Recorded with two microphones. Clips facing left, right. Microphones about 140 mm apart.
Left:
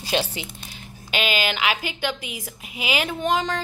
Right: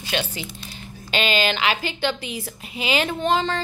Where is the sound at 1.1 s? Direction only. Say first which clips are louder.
Right 2 dB; 10° left (ahead or behind).